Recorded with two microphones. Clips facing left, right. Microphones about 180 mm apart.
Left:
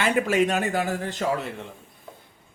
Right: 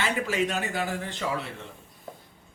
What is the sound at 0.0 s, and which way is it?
Speech, 50° left (ahead or behind).